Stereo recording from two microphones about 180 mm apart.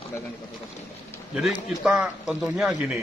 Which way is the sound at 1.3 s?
Centre (ahead or behind).